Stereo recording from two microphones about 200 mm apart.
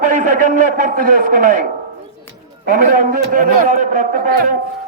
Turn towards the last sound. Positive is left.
turn(degrees=-45)  # may be behind; listen again after turning